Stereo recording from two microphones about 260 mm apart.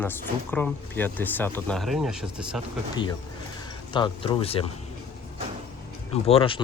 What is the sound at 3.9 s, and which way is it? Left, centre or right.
Speech, centre.